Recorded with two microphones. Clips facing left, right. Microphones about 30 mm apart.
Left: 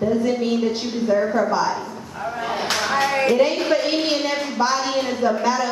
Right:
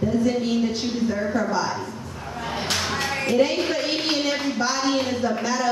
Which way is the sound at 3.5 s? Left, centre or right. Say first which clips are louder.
Left 4 dB; centre.